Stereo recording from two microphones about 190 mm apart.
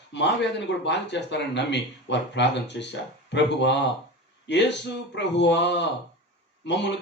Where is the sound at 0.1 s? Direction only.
65° left (ahead or behind).